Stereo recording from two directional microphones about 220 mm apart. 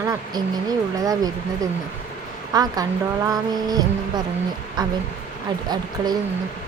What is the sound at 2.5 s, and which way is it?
Speech, 15° right (ahead or behind).